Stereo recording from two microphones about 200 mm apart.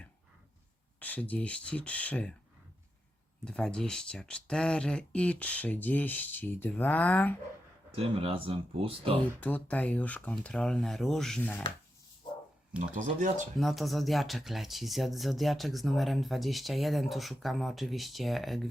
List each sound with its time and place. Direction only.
0.9 s speech: 10° left (ahead or behind)
3.4 s speech: 5° left (ahead or behind)
7.9 s speech: 30° right (ahead or behind)
9.4 s speech: 5° left (ahead or behind)
12.9 s speech: 35° right (ahead or behind)
13.6 s speech: centre (ahead or behind)